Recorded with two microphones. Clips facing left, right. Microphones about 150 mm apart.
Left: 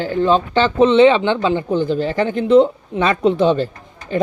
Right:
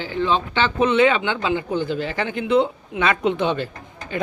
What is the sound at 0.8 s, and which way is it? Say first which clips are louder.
Speech: left 6 dB; 30° left (ahead or behind).